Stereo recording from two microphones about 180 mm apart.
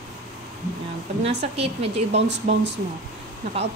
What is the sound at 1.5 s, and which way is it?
Speech, 35° right (ahead or behind).